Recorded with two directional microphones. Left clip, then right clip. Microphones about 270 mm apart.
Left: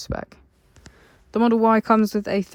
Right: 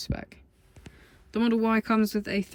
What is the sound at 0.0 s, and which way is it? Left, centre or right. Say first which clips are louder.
Speech: left 6 dB; centre.